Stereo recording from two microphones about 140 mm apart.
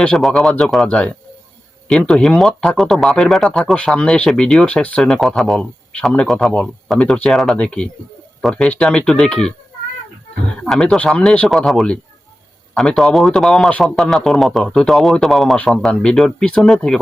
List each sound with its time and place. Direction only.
0.0 s speech: 5° left (ahead or behind)
10.6 s speech: 5° left (ahead or behind)